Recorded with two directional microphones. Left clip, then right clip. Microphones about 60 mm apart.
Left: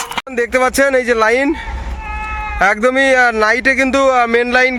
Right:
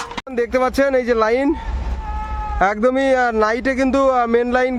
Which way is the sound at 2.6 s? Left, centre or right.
Centre.